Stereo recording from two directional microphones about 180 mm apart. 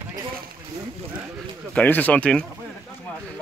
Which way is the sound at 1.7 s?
10° left (ahead or behind).